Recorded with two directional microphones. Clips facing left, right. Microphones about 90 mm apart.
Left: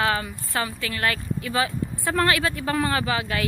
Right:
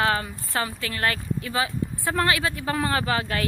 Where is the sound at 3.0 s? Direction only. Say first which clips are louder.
Even; 40° right (ahead or behind).